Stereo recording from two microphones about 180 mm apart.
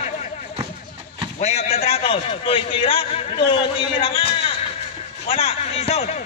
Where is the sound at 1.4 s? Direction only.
35° left (ahead or behind).